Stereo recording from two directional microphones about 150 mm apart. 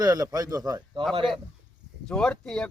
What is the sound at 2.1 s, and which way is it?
Speech, 5° left (ahead or behind).